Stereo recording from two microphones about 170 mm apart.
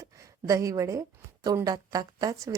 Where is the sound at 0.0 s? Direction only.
20° right (ahead or behind).